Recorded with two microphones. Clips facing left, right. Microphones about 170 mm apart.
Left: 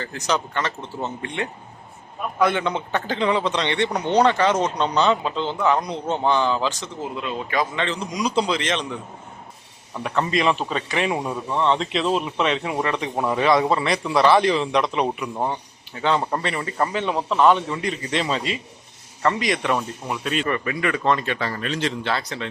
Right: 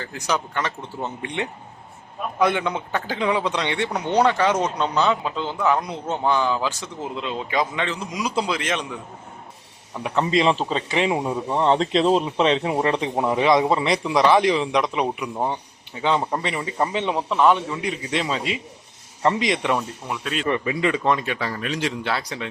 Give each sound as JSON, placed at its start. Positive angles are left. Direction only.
{"t": 0.0, "sound": "speech", "side_deg": -10}
{"t": 7.2, "sound": "a man's voice", "side_deg": -20}
{"t": 7.8, "sound": "speech", "side_deg": -5}
{"t": 10.0, "sound": "a man's voice", "side_deg": -20}
{"t": 11.4, "sound": "speech", "side_deg": -35}
{"t": 13.1, "sound": "speech", "side_deg": -15}
{"t": 19.2, "sound": "speech", "side_deg": -20}
{"t": 20.1, "sound": "speech", "side_deg": 0}
{"t": 20.5, "sound": "speech", "side_deg": -20}